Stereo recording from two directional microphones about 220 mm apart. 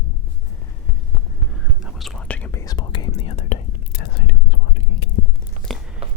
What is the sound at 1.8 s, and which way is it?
Whispering, 5° left (ahead or behind).